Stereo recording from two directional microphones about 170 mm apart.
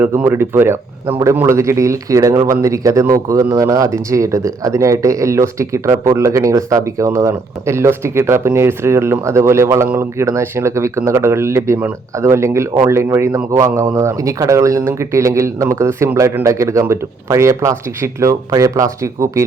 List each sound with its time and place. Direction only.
0.0 s speech: 10° right (ahead or behind)